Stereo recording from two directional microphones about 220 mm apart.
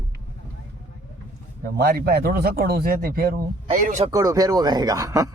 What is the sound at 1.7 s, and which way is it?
Speech, 45° right (ahead or behind).